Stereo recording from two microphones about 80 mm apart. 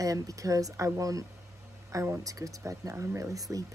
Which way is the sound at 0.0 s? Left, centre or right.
Right.